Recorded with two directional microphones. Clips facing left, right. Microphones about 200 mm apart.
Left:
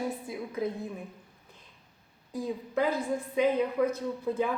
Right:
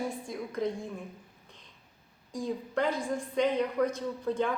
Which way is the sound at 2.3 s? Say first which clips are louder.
Left 1 dB; 5° left (ahead or behind).